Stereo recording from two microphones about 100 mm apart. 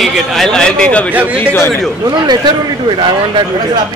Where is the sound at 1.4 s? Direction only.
20° left (ahead or behind).